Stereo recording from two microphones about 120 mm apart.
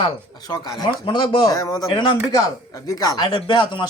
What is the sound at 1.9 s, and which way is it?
Speech, 40° left (ahead or behind).